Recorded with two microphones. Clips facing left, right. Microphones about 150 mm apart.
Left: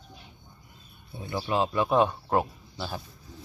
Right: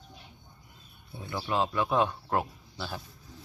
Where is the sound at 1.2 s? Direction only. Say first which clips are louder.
Left 2 dB; 15° left (ahead or behind).